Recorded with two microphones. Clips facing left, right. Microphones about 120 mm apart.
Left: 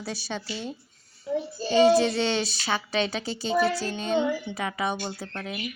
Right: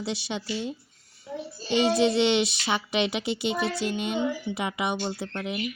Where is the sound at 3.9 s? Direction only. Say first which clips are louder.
Left 2 dB; 15° right (ahead or behind).